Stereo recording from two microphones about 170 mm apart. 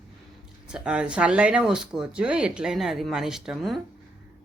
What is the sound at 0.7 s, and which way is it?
Speech, 5° right (ahead or behind).